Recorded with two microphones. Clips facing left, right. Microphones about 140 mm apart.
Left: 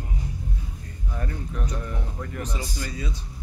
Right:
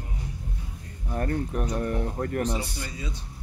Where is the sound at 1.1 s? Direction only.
50° right (ahead or behind).